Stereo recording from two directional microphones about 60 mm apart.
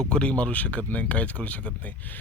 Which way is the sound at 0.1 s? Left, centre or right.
Centre.